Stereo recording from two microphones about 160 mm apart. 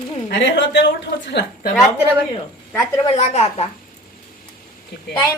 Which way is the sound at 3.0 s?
45° left (ahead or behind).